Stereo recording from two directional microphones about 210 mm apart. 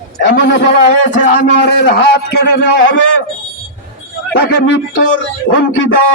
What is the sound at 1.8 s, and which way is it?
A man's voice, 55° left (ahead or behind).